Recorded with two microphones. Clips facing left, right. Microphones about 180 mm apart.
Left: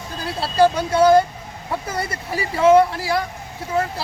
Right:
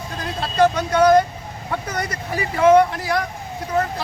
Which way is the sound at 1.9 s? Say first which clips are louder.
Even; 30° left (ahead or behind).